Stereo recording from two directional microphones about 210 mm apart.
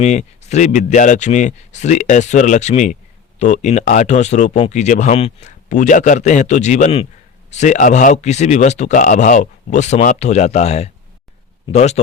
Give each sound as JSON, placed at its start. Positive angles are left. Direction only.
{"t": 0.0, "sound": "speech", "side_deg": 35}